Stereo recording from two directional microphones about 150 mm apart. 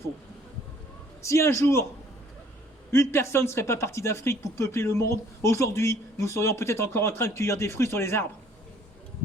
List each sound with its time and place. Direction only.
1.2 s speech: 20° left (ahead or behind)
2.9 s speech: 20° left (ahead or behind)